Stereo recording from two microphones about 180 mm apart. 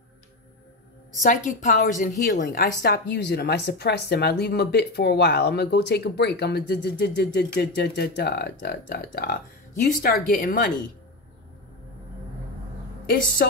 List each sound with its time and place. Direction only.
1.2 s a woman's voice: 45° left (ahead or behind)
13.4 s speech: 65° left (ahead or behind)